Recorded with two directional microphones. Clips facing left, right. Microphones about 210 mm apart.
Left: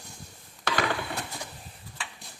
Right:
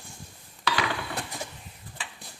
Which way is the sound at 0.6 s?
50° left (ahead or behind).